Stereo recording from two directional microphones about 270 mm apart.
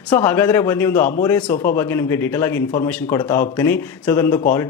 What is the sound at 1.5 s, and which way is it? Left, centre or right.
Speech, left.